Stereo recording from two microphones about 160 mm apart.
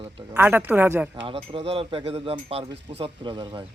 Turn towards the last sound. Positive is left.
turn(degrees=-30)  # may be behind; listen again after turning